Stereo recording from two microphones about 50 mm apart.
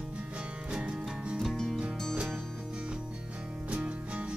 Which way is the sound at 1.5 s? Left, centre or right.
Centre.